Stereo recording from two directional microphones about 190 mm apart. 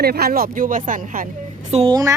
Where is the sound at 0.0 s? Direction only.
55° right (ahead or behind).